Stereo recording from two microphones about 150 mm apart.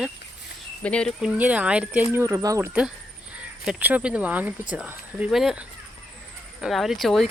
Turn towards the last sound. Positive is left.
turn(degrees=0)  # may be behind; listen again after turning